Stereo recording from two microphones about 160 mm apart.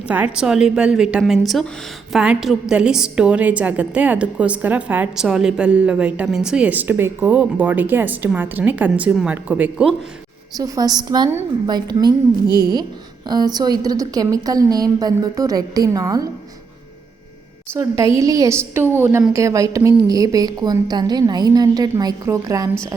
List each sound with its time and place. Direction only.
0.1 s a woman's voice: 5° right (ahead or behind)
10.6 s a woman's voice: 25° right (ahead or behind)
11.3 s a woman's voice: 15° right (ahead or behind)
11.7 s a woman's voice: 25° right (ahead or behind)
13.2 s a woman's voice: 25° right (ahead or behind)
17.7 s a woman's voice: 20° right (ahead or behind)